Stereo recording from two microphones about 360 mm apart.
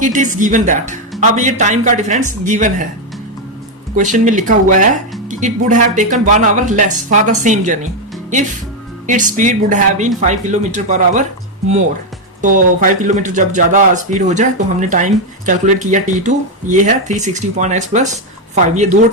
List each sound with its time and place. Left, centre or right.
0.0 s speech: right
3.9 s speech: right
9.0 s speech: right
12.4 s speech: right